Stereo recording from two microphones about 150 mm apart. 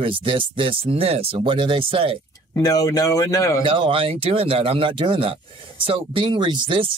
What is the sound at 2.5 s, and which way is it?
Speech, 25° left (ahead or behind).